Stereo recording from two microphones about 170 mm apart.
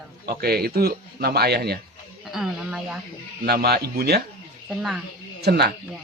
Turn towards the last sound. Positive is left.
turn(degrees=-70)  # may be behind; listen again after turning